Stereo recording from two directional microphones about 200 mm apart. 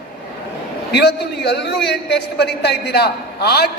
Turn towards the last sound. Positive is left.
turn(degrees=55)  # may be behind; listen again after turning